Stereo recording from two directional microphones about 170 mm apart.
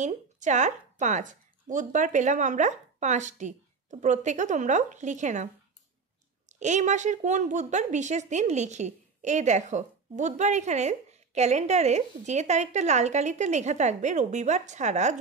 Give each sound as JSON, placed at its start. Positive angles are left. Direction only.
{"t": 0.0, "sound": "speech", "side_deg": -45}
{"t": 6.5, "sound": "speech", "side_deg": -45}